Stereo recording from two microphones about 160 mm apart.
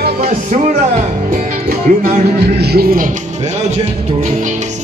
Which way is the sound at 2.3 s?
90° right.